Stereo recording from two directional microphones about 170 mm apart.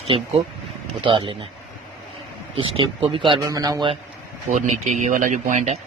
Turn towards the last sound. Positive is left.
turn(degrees=-45)  # may be behind; listen again after turning